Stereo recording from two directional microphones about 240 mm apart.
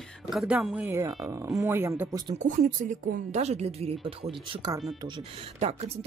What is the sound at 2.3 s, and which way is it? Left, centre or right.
A woman's voice, right.